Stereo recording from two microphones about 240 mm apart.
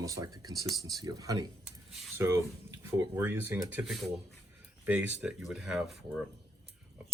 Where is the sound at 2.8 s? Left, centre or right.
Centre.